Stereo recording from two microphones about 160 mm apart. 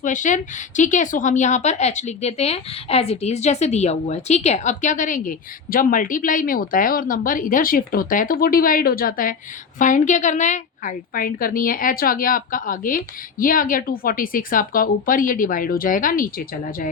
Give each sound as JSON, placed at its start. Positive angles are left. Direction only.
{"t": 0.0, "sound": "a woman's voice", "side_deg": 50}